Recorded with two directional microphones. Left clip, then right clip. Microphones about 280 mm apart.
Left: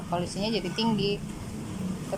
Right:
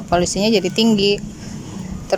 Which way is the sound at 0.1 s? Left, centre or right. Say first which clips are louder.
Right 14 dB; right.